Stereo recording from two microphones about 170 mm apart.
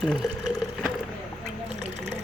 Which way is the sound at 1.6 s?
40° right (ahead or behind).